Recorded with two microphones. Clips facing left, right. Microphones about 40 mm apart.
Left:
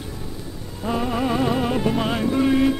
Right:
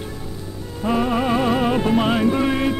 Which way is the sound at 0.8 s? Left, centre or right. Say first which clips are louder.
Right 3 dB; right.